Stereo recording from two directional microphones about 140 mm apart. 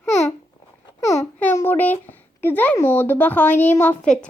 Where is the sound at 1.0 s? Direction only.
25° left (ahead or behind).